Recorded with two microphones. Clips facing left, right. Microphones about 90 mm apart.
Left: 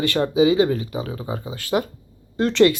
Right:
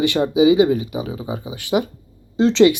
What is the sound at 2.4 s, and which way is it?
Speech, 20° right (ahead or behind).